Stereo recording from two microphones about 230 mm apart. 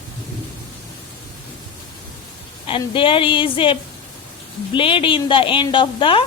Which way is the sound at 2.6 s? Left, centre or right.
Left.